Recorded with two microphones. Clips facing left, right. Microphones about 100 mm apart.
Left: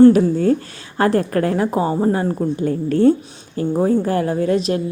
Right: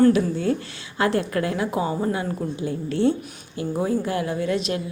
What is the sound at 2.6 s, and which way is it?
A woman's voice, 45° left (ahead or behind).